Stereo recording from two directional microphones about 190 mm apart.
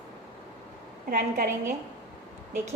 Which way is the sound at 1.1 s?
45° right (ahead or behind).